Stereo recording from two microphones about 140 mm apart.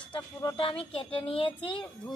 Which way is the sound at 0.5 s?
40° left (ahead or behind).